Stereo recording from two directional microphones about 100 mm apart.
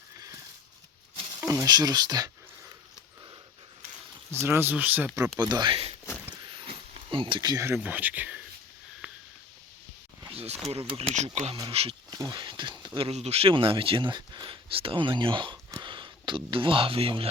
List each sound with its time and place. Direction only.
1.4 s speech: 35° right (ahead or behind)
4.4 s speech: 20° right (ahead or behind)
5.4 s speech: 45° right (ahead or behind)
6.7 s a sound: 60° right (ahead or behind)
7.5 s speech: 30° right (ahead or behind)
7.8 s speech: 15° right (ahead or behind)
9.0 s sniff: 15° right (ahead or behind)
10.3 s a sound: 90° right
10.7 s speech: 75° right (ahead or behind)
11.7 s speech: 90° right
12.4 s a sound: 50° right (ahead or behind)
13.0 s speech: 90° right
13.5 s speech: 60° right (ahead or behind)